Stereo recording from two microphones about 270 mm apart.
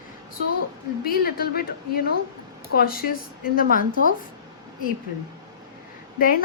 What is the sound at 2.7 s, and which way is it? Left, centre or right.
A woman's voice, left.